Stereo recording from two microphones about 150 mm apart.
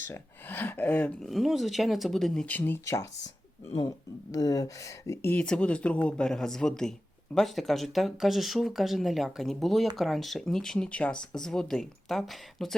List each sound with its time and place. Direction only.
0.0 s speech: 15° left (ahead or behind)
1.2 s speech: centre (ahead or behind)